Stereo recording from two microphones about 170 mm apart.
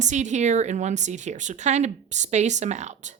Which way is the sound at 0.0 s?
45° right (ahead or behind).